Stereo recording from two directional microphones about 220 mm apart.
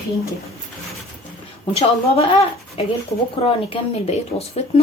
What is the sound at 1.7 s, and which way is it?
Speech, 30° left (ahead or behind).